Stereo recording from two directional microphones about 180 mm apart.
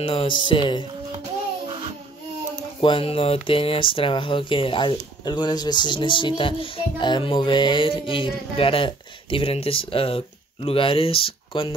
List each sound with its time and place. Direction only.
0.0 s speech: 30° left (ahead or behind)
2.8 s speech: 30° left (ahead or behind)